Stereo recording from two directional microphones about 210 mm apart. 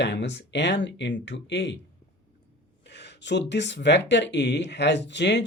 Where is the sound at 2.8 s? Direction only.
55° left (ahead or behind).